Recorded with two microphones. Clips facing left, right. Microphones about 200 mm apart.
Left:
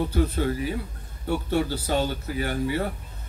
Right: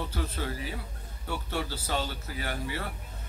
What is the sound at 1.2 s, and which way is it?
A man's voice, 50° left (ahead or behind).